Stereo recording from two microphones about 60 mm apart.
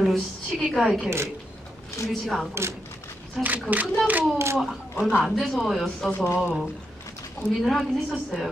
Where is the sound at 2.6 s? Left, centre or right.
Right.